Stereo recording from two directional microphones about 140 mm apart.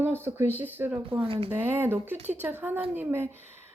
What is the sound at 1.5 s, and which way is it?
Speech, 15° right (ahead or behind).